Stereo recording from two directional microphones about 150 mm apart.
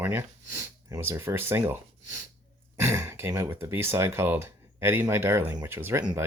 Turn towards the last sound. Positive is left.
turn(degrees=-15)  # may be behind; listen again after turning